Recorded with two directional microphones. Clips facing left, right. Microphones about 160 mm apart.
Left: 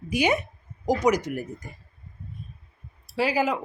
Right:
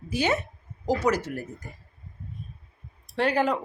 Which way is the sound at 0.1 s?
15° left (ahead or behind).